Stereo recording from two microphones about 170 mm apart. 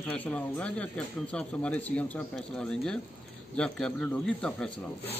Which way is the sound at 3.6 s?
5° left (ahead or behind).